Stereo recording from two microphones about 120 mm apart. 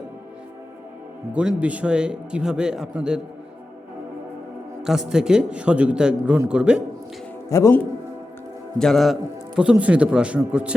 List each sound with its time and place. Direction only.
1.3 s a man's voice: 10° right (ahead or behind)
4.8 s a man's voice: 5° right (ahead or behind)
7.5 s speech: 25° left (ahead or behind)
8.8 s a man's voice: centre (ahead or behind)
9.6 s a man's voice: 10° right (ahead or behind)